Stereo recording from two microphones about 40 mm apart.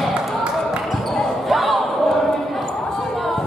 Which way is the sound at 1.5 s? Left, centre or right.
Centre.